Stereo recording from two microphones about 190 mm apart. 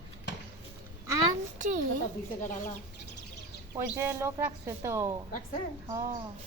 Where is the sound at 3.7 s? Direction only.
10° right (ahead or behind).